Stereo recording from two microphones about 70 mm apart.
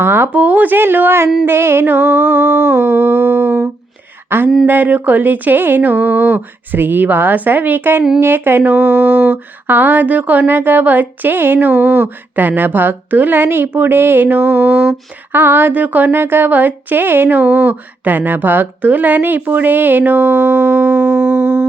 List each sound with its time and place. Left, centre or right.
0.0 s speech: right
4.6 s speech: right
15.3 s speech: right